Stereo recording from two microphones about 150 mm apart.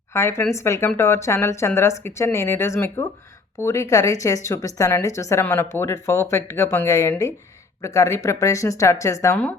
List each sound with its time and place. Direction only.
0.1 s speech: 15° left (ahead or behind)